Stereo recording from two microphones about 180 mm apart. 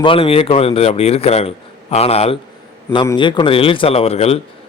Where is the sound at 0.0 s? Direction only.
30° left (ahead or behind).